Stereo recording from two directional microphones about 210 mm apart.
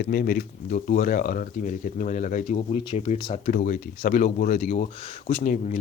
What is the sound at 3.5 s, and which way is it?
Speech, 40° left (ahead or behind).